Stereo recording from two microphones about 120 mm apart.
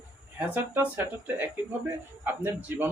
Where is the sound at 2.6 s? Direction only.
20° right (ahead or behind).